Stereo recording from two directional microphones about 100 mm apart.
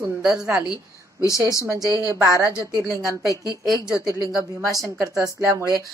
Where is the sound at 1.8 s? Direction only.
35° left (ahead or behind).